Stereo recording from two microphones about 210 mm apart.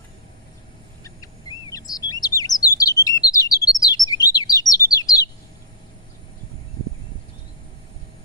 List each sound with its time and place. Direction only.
1.0 s bird: 15° left (ahead or behind)
2.2 s chirp: 15° left (ahead or behind)
2.8 s bird: 15° left (ahead or behind)
3.3 s chirp: 15° left (ahead or behind)